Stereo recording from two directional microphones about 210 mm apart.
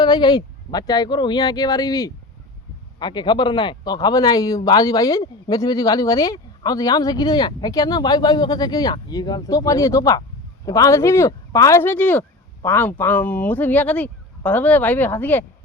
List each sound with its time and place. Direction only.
0.0 s speech: 20° left (ahead or behind)